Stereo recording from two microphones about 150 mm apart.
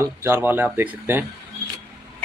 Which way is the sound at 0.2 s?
15° right (ahead or behind).